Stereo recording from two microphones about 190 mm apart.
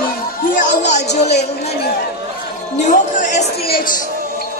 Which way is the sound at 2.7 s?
40° left (ahead or behind).